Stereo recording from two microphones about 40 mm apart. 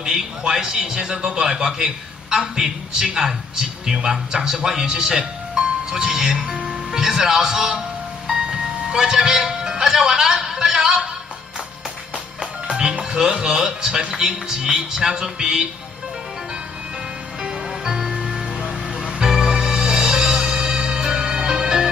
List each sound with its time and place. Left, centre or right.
0.5 s speech: centre
8.3 s music: centre
12.4 s music: centre
13.2 s speech: centre
17.4 s music: centre